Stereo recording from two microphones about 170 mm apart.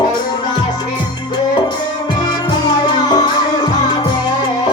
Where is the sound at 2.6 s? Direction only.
25° left (ahead or behind).